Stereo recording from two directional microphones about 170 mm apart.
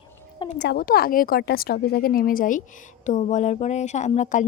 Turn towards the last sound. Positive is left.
turn(degrees=45)  # may be behind; listen again after turning